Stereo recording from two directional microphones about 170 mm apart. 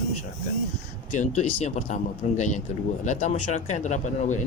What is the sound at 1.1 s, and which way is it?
Speech, 45° left (ahead or behind).